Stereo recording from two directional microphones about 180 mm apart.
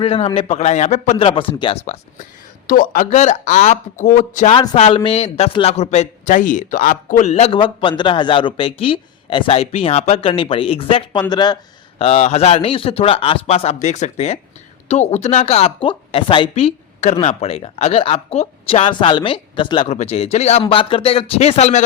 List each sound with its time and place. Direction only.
0.0 s speech: 30° left (ahead or behind)
2.6 s speech: 50° left (ahead or behind)
4.5 s speech: 25° left (ahead or behind)
11.9 s speech: 35° left (ahead or behind)